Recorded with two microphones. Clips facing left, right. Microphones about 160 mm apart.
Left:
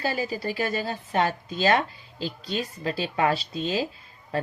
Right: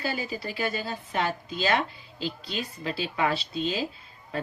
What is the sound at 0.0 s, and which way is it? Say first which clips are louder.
Speech: left 4 dB; 35° left (ahead or behind).